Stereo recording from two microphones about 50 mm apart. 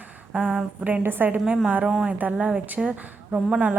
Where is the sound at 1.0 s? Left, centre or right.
Right.